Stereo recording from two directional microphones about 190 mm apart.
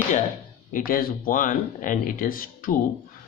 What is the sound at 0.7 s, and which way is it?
Speech, 45° left (ahead or behind).